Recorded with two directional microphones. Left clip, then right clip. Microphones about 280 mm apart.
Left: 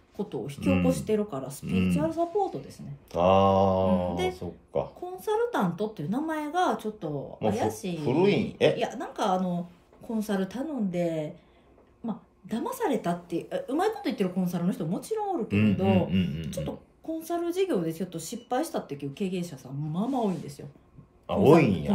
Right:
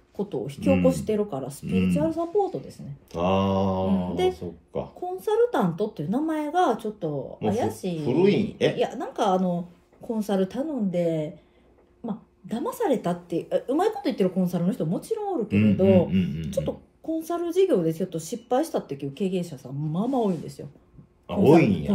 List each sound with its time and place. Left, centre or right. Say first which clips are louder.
0.2 s a woman's voice: right 4 dB; centre
3.1 s mantra: left 3 dB; centre
5.1 s a woman's voice: right 5 dB; centre
7.3 s mantra: even; centre
8.7 s speech: right 4 dB; centre
12.4 s speech: right 4 dB; centre
15.5 s mantra: right 8 dB; centre
16.4 s speech: right 7 dB; centre
21.3 s mantra: right 2 dB; centre